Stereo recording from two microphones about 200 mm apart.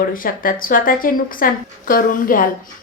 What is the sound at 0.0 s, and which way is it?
A woman's voice, 45° left (ahead or behind).